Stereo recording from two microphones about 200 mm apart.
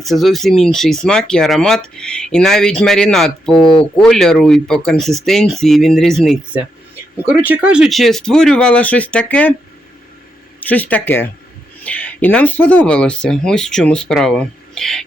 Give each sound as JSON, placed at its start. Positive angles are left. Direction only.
{"t": 0.0, "sound": "speech", "side_deg": 0}
{"t": 10.6, "sound": "speech", "side_deg": 10}